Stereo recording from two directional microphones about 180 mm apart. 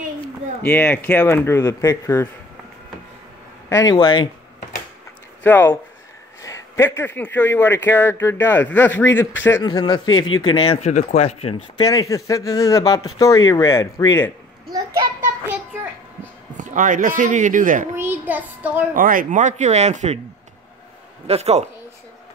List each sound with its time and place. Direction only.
0.6 s speech: 10° left (ahead or behind)
3.6 s speech: 15° left (ahead or behind)
3.9 s speech: 25° left (ahead or behind)
5.4 s speech: 10° left (ahead or behind)
9.6 s speech: 25° left (ahead or behind)
10.8 s speech: 45° left (ahead or behind)
11.8 s speech: 20° left (ahead or behind)
14.7 s child singing: 20° right (ahead or behind)
15.4 s a sound: 10° right (ahead or behind)
16.5 s a man's voice: 45° right (ahead or behind)
17.9 s child singing: 10° right (ahead or behind)
18.9 s speech: 50° right (ahead or behind)
21.3 s speech: 35° right (ahead or behind)